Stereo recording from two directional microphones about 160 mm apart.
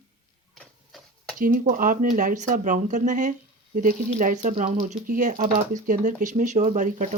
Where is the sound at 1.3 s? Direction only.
60° right (ahead or behind).